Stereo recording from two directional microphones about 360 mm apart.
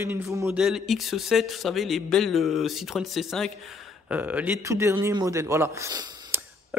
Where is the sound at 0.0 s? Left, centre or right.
Centre.